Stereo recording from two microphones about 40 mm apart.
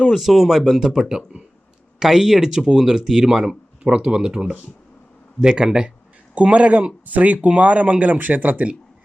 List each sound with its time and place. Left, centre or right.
0.0 s speech: centre
3.8 s speech: right
6.3 s speech: right
7.0 s speech: right